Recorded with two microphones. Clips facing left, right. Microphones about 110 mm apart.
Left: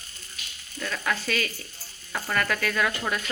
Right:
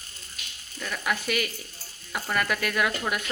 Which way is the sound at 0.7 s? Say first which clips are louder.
Left 1 dB; 10° right (ahead or behind).